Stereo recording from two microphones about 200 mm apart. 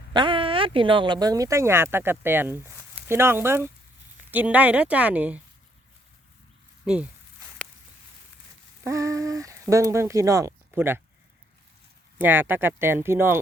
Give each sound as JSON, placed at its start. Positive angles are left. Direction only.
{"t": 0.1, "sound": "speech", "side_deg": -25}
{"t": 6.8, "sound": "speech", "side_deg": -5}
{"t": 8.8, "sound": "speech", "side_deg": -15}
{"t": 12.2, "sound": "speech", "side_deg": -10}